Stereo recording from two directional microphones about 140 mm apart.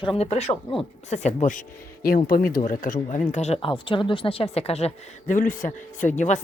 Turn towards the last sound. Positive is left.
turn(degrees=60)  # may be behind; listen again after turning